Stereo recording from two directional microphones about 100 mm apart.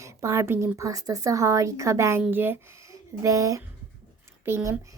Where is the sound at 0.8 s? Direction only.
35° right (ahead or behind); by 2.6 s 20° right (ahead or behind).